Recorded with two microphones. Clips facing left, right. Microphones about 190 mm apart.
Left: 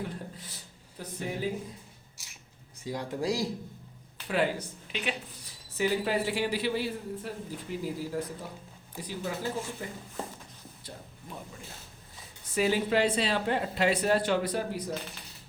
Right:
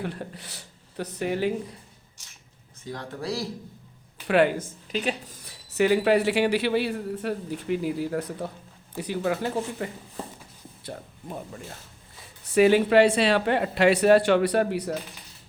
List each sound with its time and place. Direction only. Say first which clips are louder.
0.0 s a sound: right 4 dB; 70° right (ahead or behind)
2.8 s speech: left 2 dB; 10° left (ahead or behind)
4.3 s speech: right 8 dB; 60° right (ahead or behind); by 5.4 s 40° right (ahead or behind)
5.5 s a man's voice: right 7 dB; 75° right (ahead or behind)
12.5 s a man's voice: right 9 dB; 70° right (ahead or behind)